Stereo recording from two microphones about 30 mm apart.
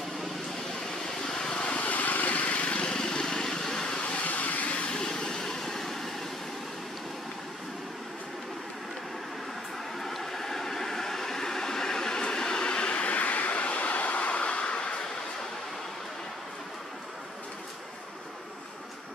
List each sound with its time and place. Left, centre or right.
1.0 s vehicle: centre
1.5 s vehicle: left
1.8 s vehicle: left
2.9 s vehicle: left
4.2 s vehicle: left
4.9 s vehicle: left
5.4 s vehicle: centre
9.9 s vehicle: centre; by 14.4 s left
14.4 s vehicle: left